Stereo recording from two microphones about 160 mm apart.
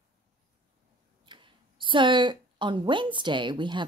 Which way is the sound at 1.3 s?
30° right (ahead or behind).